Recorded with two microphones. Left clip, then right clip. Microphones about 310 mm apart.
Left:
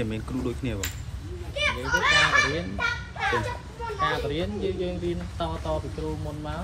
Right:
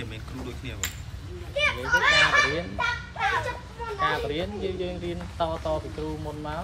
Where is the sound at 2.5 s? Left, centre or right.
Right.